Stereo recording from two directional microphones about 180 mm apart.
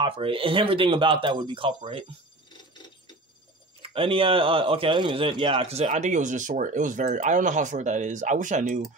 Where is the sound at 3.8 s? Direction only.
30° right (ahead or behind).